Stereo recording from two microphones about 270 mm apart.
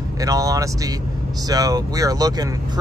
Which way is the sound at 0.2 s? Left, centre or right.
Centre.